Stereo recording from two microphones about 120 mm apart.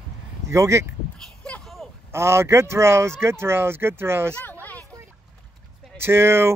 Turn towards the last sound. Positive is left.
turn(degrees=-20)  # may be behind; listen again after turning